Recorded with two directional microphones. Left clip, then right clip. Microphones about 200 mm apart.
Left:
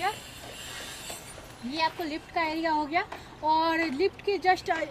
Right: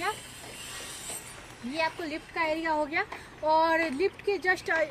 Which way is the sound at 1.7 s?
70° left (ahead or behind).